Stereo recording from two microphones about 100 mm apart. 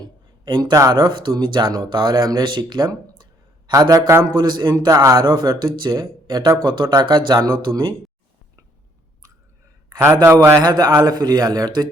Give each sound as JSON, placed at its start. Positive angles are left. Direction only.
{"t": 0.0, "sound": "a sound", "side_deg": -45}
{"t": 0.7, "sound": "speech", "side_deg": -35}
{"t": 4.9, "sound": "speech", "side_deg": -35}
{"t": 5.2, "sound": "speech", "side_deg": -45}
{"t": 7.7, "sound": "a man's voice", "side_deg": -30}
{"t": 10.0, "sound": "a man's voice", "side_deg": -30}
{"t": 10.6, "sound": "speech", "side_deg": -40}